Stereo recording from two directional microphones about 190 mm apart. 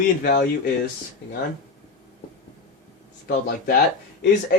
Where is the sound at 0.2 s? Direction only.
50° left (ahead or behind).